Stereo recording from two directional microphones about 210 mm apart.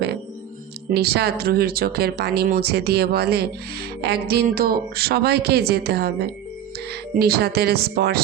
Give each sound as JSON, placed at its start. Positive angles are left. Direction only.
{"t": 0.9, "sound": "speech", "side_deg": -50}